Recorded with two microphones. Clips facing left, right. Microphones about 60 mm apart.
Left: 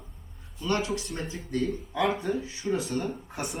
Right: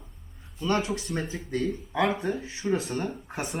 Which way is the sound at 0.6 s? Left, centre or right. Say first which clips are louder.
Right 1 dB; right.